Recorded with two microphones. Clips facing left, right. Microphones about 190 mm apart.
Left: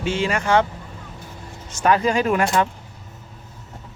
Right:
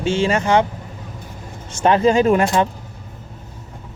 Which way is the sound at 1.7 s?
25° right (ahead or behind).